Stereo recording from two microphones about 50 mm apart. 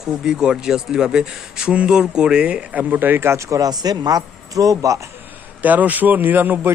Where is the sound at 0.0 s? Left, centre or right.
Centre.